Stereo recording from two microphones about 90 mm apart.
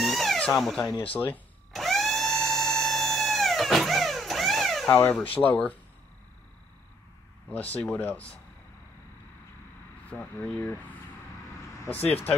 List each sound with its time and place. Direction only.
0.0 s a sound: 5° left (ahead or behind)
1.0 s speech: 15° left (ahead or behind)
1.7 s a sound: centre (ahead or behind)
4.9 s speech: 15° left (ahead or behind)
7.4 s speech: 15° left (ahead or behind)
10.1 s speech: 20° left (ahead or behind)